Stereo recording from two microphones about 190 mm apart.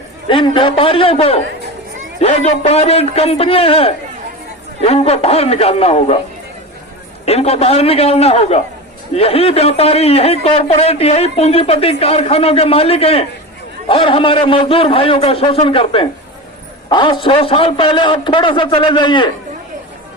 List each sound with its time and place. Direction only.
0.3 s a man's voice: 25° left (ahead or behind)
7.3 s a man's voice: 35° left (ahead or behind)